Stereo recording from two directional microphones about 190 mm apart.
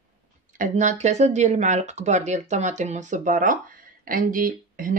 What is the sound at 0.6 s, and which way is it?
Speech, 40° right (ahead or behind).